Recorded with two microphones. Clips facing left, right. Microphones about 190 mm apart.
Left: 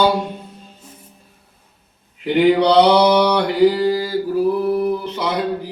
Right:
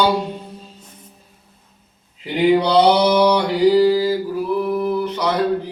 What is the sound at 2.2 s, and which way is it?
Mantra, 70° left (ahead or behind).